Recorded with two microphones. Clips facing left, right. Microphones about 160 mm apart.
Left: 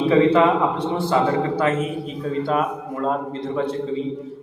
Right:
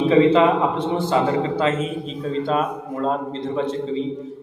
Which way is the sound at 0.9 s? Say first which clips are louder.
Left 1 dB; 20° right (ahead or behind).